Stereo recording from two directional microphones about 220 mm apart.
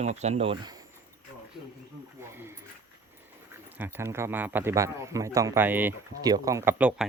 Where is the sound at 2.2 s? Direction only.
10° right (ahead or behind).